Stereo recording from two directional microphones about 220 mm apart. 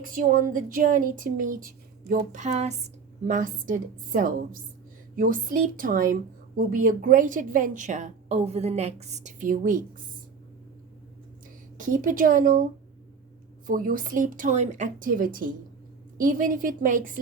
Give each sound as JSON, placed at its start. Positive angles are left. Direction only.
{"t": 0.0, "sound": "a woman's voice", "side_deg": -40}
{"t": 11.8, "sound": "a woman's voice", "side_deg": -40}
{"t": 13.7, "sound": "a woman's voice", "side_deg": -40}